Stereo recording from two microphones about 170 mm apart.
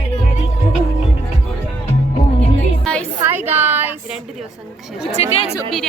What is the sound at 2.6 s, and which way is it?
Music, 5° left (ahead or behind).